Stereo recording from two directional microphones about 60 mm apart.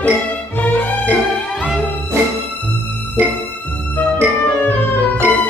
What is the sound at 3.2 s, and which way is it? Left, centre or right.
Music, right.